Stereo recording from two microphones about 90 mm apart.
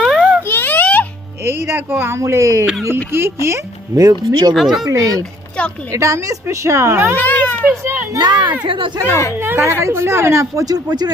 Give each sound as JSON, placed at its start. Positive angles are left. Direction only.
{"t": 0.0, "sound": "boing", "side_deg": -5}
{"t": 0.4, "sound": "a sound", "side_deg": 20}
{"t": 1.5, "sound": "speech", "side_deg": -25}
{"t": 4.5, "sound": "speech", "side_deg": -5}
{"t": 4.9, "sound": "speech", "side_deg": -40}
{"t": 7.2, "sound": "a sound", "side_deg": 20}
{"t": 8.1, "sound": "speech", "side_deg": -50}
{"t": 8.6, "sound": "speech", "side_deg": -70}
{"t": 9.0, "sound": "speech", "side_deg": 30}
{"t": 9.4, "sound": "a woman's voice", "side_deg": -25}